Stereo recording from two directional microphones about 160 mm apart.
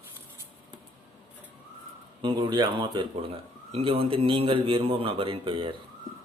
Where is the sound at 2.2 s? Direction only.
30° right (ahead or behind).